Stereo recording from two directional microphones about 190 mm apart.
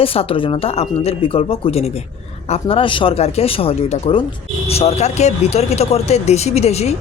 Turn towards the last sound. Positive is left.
turn(degrees=35)  # may be behind; listen again after turning